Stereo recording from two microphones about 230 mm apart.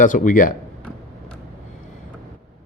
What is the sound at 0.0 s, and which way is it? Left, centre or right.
Speech, left.